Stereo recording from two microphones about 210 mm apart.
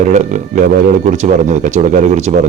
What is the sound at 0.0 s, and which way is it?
Speech, 35° right (ahead or behind).